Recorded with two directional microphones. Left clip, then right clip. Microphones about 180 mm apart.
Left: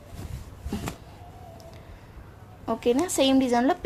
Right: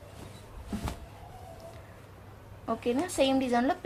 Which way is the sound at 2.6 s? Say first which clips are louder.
Left 6 dB; 55° left (ahead or behind).